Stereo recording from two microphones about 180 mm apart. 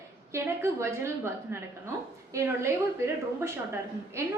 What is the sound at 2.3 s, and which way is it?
Speech, 15° right (ahead or behind).